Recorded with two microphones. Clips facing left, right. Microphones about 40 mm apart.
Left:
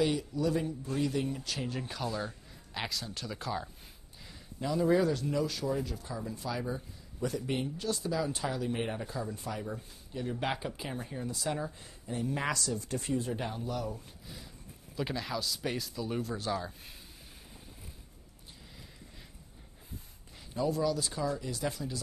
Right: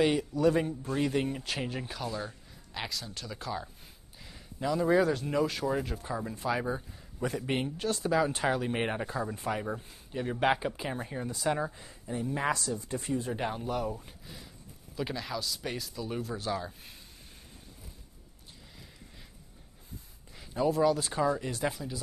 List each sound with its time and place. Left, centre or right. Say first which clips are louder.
0.0 s speech: right 4 dB; right
1.9 s speech: even; centre
4.9 s speech: right 2 dB; right
11.7 s speech: right 2 dB; centre
14.2 s a sound: even; centre
15.0 s speech: even; centre
20.5 s speech: right 4 dB; right
21.6 s speech: right 1 dB; centre